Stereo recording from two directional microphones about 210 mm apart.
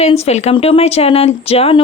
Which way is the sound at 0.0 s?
30° left (ahead or behind).